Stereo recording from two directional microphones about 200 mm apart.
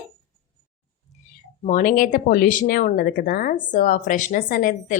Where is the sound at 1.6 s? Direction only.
40° left (ahead or behind).